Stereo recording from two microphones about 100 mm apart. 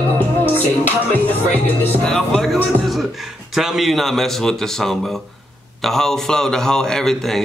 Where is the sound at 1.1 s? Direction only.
20° left (ahead or behind).